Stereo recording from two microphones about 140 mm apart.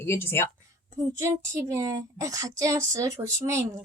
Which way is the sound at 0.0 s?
15° left (ahead or behind).